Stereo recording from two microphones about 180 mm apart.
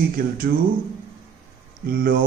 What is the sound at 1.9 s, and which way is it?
Speech, 55° right (ahead or behind).